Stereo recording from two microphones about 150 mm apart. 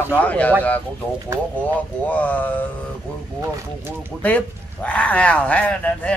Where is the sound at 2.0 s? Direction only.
10° left (ahead or behind).